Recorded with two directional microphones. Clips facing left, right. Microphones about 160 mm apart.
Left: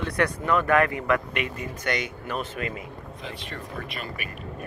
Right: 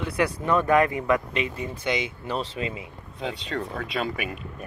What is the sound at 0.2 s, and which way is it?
Speech, 20° right (ahead or behind).